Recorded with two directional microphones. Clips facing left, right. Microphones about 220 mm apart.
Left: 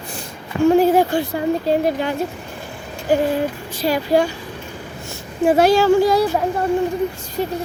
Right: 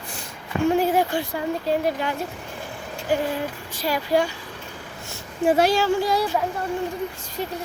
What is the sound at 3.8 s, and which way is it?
Speech, 30° left (ahead or behind).